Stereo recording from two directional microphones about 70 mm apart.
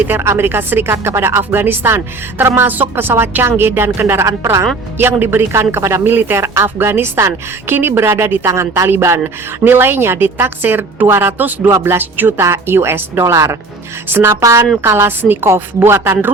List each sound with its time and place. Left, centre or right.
0.1 s speech: right
4.3 s speech: right
4.9 s speech: right
8.9 s speech: right